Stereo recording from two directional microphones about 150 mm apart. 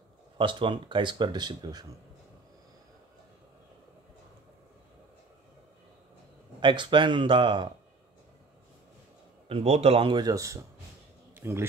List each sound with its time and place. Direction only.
0.4 s speech: 35° right (ahead or behind)
6.6 s speech: 30° right (ahead or behind)
9.5 s a man's voice: 45° right (ahead or behind); by 11.6 s 15° right (ahead or behind)